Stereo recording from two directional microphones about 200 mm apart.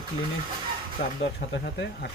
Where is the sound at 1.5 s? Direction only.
55° left (ahead or behind).